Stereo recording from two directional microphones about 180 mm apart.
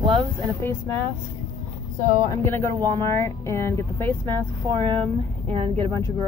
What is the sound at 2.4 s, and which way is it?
Speech, 10° left (ahead or behind).